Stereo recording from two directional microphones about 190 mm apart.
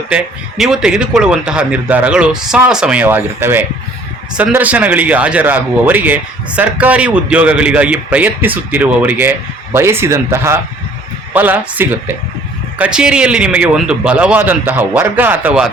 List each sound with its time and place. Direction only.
0.1 s a man's voice: centre (ahead or behind)